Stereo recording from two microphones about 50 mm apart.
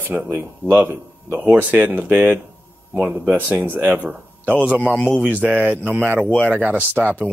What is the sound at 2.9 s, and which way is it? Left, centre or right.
Speech, right.